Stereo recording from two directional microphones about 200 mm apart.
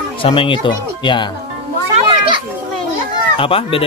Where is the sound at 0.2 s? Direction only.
25° left (ahead or behind).